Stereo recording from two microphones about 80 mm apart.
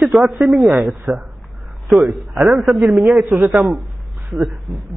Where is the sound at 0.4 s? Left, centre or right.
Centre.